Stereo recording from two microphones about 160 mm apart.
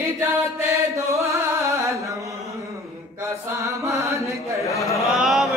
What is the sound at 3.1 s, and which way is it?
Chant, 20° right (ahead or behind).